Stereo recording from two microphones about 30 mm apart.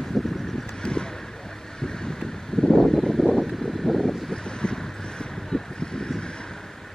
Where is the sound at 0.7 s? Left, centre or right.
Left.